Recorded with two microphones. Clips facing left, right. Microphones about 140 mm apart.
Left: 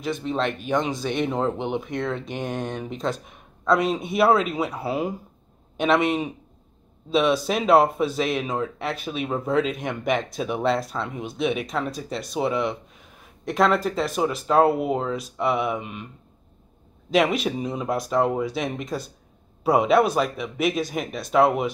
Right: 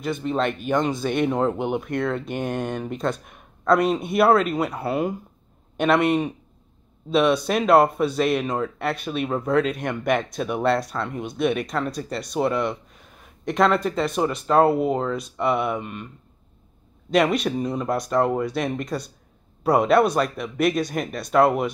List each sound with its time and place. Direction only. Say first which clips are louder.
0.0 s speech: right 2 dB; centre (ahead or behind)
17.1 s speech: right 1 dB; centre (ahead or behind)